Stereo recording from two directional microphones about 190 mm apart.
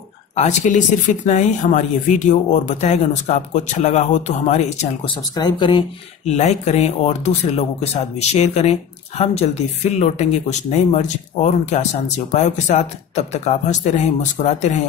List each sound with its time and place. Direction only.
0.4 s speech: 40° left (ahead or behind)
5.3 s speech: 20° left (ahead or behind)
6.2 s speech: 35° left (ahead or behind)